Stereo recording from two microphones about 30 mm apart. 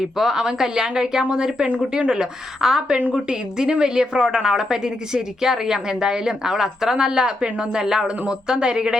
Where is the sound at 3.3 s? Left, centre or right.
Right.